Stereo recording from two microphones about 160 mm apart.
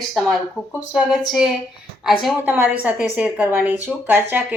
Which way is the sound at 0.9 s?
5° right (ahead or behind).